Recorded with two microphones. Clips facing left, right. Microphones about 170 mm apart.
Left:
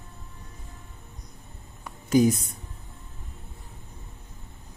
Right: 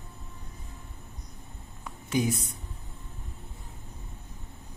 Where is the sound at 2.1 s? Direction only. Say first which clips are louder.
Left 8 dB; 40° left (ahead or behind).